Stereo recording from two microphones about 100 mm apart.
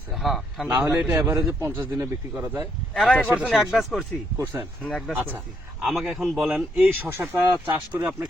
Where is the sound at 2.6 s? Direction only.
5° left (ahead or behind).